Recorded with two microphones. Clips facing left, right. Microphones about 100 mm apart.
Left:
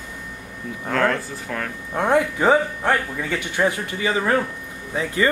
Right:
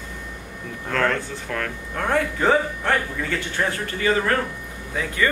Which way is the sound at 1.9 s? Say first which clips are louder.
Left 4 dB; 20° left (ahead or behind).